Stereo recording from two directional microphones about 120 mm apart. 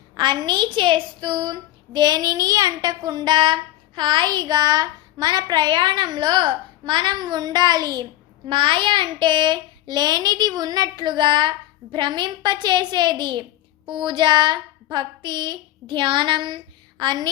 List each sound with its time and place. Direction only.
0.1 s a woman's voice: 40° right (ahead or behind)